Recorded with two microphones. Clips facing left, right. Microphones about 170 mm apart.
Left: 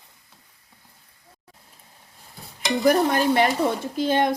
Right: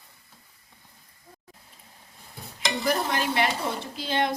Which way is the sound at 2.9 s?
50° left (ahead or behind).